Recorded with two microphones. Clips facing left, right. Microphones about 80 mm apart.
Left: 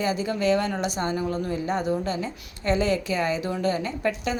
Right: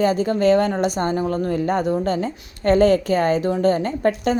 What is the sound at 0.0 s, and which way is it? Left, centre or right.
A woman's voice, right.